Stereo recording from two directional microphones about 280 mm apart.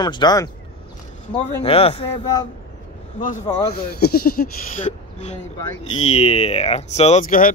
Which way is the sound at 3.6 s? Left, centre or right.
Left.